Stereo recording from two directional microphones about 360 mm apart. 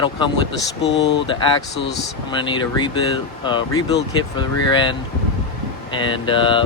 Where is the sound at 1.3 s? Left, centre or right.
Centre.